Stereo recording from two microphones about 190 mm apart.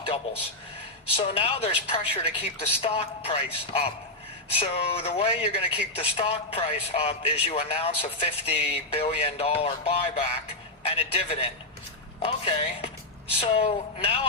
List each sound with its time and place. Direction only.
1.1 s a woman's voice: 30° left (ahead or behind)